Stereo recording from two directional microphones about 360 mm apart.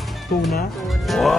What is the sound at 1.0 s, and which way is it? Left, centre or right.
Speech, centre.